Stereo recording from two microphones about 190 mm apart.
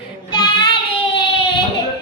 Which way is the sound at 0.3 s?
20° left (ahead or behind).